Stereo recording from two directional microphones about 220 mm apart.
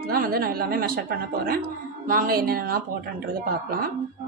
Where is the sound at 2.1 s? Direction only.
40° right (ahead or behind).